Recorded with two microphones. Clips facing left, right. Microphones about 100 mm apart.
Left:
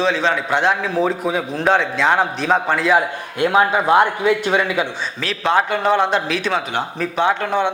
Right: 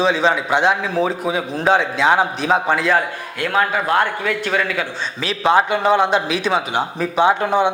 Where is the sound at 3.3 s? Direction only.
20° left (ahead or behind).